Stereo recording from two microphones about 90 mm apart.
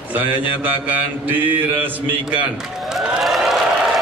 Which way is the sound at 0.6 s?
20° right (ahead or behind).